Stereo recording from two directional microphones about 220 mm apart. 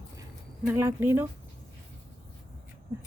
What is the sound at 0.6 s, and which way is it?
Speech, 10° right (ahead or behind).